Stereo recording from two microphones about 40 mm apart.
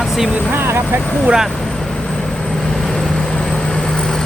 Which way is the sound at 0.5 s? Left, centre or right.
Right.